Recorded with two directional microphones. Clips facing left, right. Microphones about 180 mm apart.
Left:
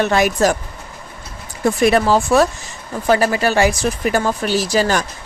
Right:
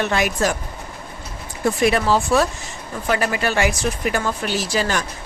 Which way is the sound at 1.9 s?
45° left (ahead or behind).